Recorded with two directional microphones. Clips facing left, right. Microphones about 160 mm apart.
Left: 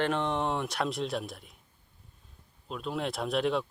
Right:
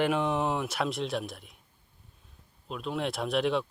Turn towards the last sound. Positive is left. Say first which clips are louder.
# right 1 dB
turn(degrees=0)  # may be behind; listen again after turning